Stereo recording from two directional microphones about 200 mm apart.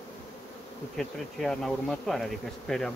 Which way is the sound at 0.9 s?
Centre (ahead or behind).